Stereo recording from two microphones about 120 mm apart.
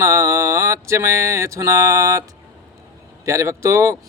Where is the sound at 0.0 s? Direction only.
25° right (ahead or behind).